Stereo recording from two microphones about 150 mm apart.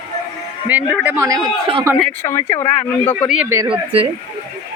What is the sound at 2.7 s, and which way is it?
Speech, 10° left (ahead or behind).